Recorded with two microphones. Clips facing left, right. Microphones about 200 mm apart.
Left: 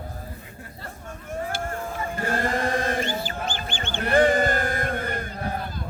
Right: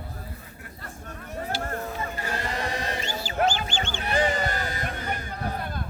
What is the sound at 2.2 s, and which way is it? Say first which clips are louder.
Goose: left 8 dB; 50° left (ahead or behind).